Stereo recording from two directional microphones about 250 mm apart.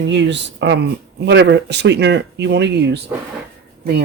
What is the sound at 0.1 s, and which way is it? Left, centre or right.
Speech, right.